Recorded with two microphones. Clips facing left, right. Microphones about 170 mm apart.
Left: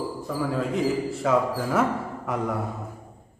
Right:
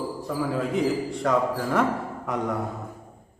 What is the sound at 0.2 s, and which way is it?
A man's voice, centre (ahead or behind).